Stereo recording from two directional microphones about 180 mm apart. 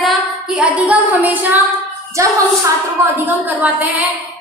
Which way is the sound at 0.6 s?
10° right (ahead or behind).